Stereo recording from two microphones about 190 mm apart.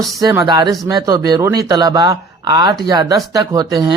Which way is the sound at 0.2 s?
20° right (ahead or behind).